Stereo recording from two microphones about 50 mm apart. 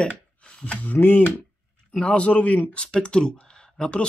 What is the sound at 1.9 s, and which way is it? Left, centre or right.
Speech, left.